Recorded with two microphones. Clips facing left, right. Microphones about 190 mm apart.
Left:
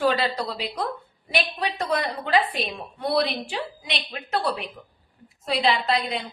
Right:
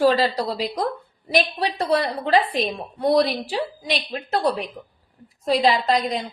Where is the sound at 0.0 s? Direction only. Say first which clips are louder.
Right 5 dB; 35° right (ahead or behind).